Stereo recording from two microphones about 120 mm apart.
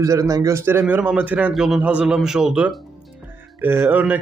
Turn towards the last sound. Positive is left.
turn(degrees=-15)  # may be behind; listen again after turning